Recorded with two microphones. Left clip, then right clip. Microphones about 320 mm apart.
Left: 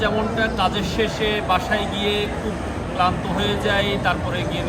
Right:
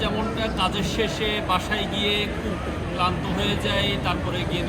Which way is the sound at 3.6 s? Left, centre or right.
Centre.